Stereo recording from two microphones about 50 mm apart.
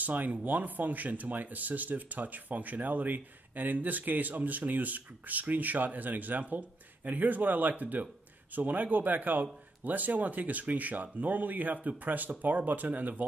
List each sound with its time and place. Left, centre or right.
0.0 s speech: right